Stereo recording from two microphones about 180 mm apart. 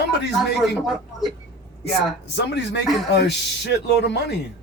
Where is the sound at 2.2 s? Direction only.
70° left (ahead or behind).